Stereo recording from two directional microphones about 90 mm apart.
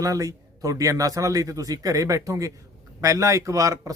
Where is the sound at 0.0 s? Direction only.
40° right (ahead or behind).